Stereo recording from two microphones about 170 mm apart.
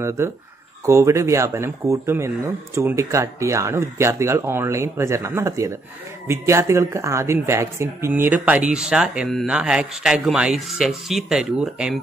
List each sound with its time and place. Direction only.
0.2 s speech: 15° right (ahead or behind)